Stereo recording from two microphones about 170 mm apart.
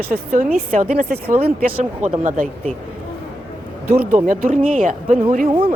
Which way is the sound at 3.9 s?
10° right (ahead or behind).